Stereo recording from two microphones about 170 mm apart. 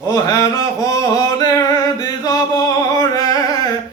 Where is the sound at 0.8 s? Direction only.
20° left (ahead or behind).